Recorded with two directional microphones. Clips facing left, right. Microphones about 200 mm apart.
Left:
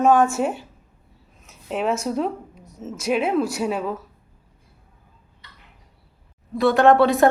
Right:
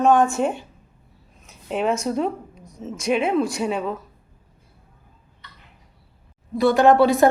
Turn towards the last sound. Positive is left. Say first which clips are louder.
# even
turn(degrees=0)  # may be behind; listen again after turning